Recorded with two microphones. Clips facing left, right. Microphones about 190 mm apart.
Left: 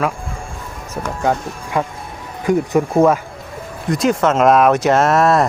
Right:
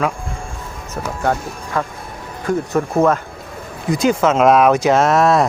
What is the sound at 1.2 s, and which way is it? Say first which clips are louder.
Speech: left 1 dB; centre (ahead or behind).